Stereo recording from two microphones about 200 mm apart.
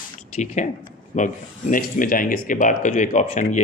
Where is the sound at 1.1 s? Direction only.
40° left (ahead or behind).